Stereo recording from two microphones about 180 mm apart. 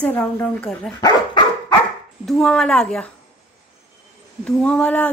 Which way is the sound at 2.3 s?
Centre (ahead or behind).